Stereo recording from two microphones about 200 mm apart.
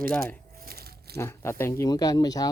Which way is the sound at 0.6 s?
50° right (ahead or behind).